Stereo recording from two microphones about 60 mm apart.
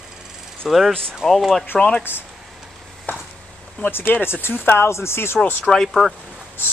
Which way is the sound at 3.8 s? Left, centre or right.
Left.